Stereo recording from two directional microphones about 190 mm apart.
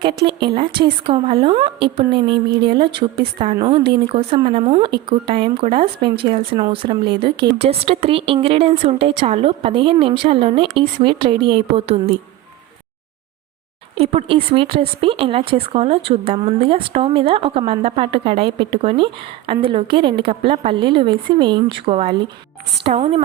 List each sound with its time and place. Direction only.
0.0 s speech: 25° right (ahead or behind)
13.9 s speech: 30° right (ahead or behind)